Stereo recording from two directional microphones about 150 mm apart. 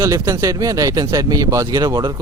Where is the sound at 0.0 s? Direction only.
20° right (ahead or behind).